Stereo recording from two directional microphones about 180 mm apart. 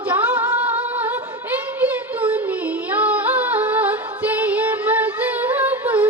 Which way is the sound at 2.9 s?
10° right (ahead or behind).